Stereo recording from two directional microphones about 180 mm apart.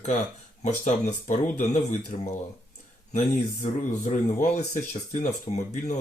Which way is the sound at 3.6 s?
45° left (ahead or behind).